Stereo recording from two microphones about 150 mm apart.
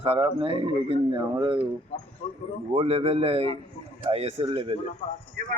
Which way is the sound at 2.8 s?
40° right (ahead or behind).